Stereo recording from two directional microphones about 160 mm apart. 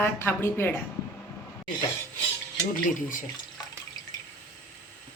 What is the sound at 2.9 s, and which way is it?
Speech, 55° left (ahead or behind).